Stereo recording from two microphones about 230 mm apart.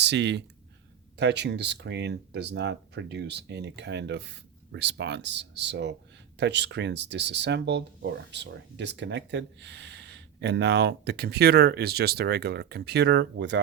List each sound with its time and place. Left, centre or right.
0.0 s speech: right